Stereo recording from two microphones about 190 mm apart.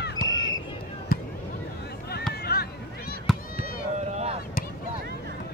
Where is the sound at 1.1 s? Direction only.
50° left (ahead or behind).